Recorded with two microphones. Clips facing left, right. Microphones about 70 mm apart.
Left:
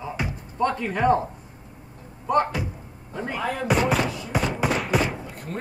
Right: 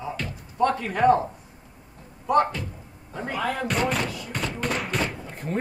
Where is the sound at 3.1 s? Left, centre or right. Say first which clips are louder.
Even; right.